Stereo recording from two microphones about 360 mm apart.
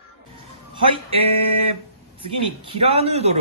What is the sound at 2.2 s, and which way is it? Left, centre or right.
A man's voice, centre.